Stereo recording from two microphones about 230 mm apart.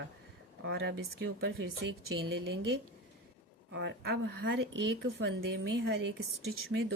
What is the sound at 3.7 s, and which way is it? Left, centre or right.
Speech, right.